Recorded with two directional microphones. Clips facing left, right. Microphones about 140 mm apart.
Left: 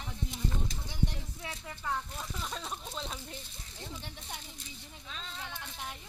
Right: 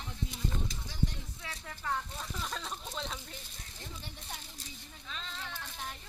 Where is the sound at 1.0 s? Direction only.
20° left (ahead or behind).